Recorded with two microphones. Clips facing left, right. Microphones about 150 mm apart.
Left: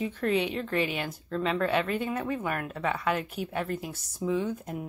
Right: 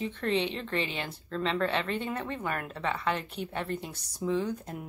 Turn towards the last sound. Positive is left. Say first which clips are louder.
# left 1 dB
turn(degrees=5)  # may be behind; listen again after turning